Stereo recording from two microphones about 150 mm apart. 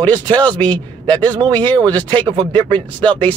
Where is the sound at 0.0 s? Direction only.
10° left (ahead or behind).